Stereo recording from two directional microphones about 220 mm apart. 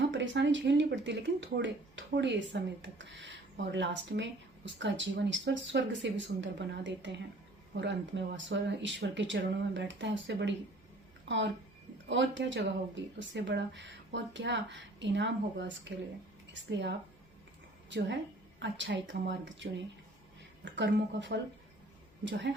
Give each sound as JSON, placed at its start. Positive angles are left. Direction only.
{"t": 0.1, "sound": "speech", "side_deg": -55}
{"t": 12.0, "sound": "a woman's voice", "side_deg": -55}
{"t": 20.7, "sound": "a woman's voice", "side_deg": -50}